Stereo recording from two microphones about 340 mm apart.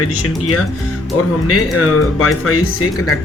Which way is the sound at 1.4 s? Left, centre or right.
Left.